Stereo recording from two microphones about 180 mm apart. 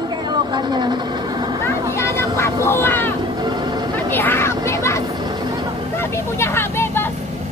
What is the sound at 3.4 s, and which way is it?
Vehicle, 25° right (ahead or behind).